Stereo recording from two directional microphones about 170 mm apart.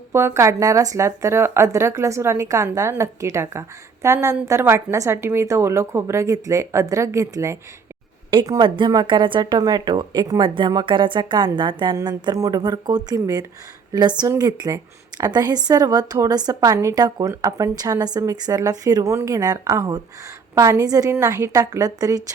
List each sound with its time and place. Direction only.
0.1 s a woman's voice: 15° right (ahead or behind)